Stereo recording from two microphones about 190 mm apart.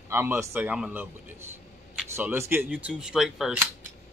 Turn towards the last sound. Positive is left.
turn(degrees=0)  # may be behind; listen again after turning